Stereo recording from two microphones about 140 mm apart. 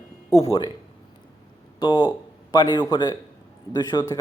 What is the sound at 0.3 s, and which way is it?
Speech, 45° left (ahead or behind).